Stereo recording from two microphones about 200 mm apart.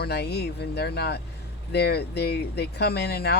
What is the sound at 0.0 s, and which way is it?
Speech, 55° left (ahead or behind).